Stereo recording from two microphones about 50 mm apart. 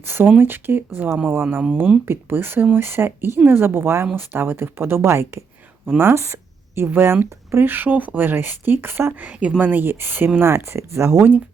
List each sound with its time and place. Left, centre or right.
0.0 s speech: right
9.6 s speech: right
10.5 s speech: right